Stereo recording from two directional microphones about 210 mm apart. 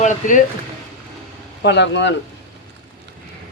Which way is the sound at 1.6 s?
55° left (ahead or behind).